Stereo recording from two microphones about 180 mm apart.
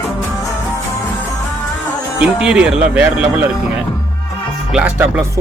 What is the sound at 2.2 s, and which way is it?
Speech, 5° right (ahead or behind).